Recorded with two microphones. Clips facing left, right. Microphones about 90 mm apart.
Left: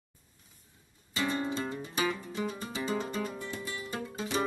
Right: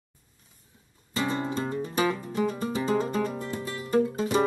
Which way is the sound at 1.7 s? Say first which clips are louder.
Right 6 dB; 40° right (ahead or behind).